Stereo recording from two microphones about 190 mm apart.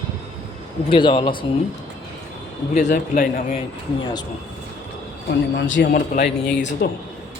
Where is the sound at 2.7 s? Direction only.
40° left (ahead or behind).